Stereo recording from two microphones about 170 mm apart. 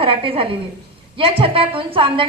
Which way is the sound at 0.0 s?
30° right (ahead or behind).